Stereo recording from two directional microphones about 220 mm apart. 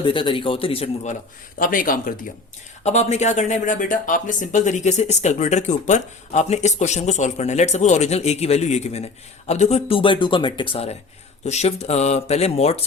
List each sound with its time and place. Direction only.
0.0 s speech: 25° left (ahead or behind)
1.5 s speech: 40° left (ahead or behind)